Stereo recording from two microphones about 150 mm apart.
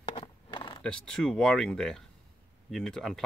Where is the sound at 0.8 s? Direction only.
5° left (ahead or behind).